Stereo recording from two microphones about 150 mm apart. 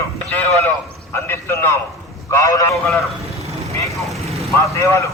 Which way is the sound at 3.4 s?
45° right (ahead or behind).